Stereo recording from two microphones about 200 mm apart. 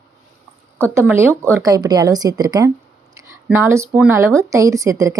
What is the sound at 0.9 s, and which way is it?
Speech, 15° right (ahead or behind).